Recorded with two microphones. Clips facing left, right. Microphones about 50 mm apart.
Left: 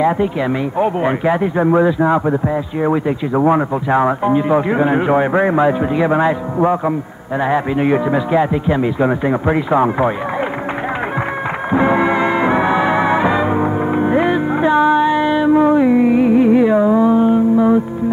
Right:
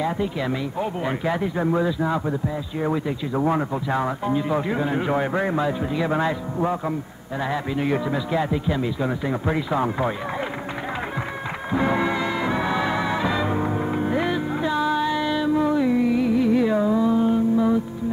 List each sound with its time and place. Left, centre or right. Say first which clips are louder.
0.7 s a man's voice: left 10 dB; left
11.7 s music: left 8 dB; left